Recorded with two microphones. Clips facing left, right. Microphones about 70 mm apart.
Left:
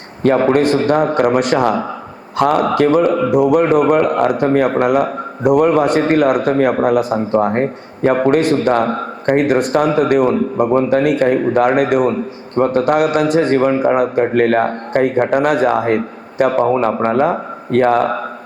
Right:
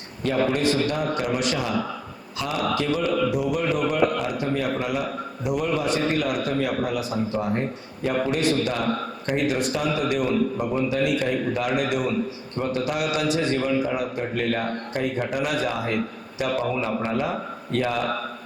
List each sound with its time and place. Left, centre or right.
0.2 s a man's voice: left
3.2 s a man's voice: left
16.0 s a man's voice: left